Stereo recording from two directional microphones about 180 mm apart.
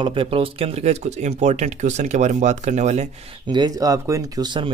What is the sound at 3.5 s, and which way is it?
Speech, 20° right (ahead or behind).